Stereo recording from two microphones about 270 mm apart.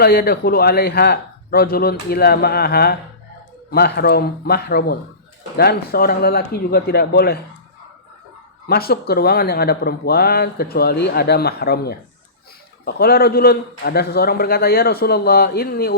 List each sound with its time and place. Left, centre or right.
0.0 s speech: left
8.6 s speech: left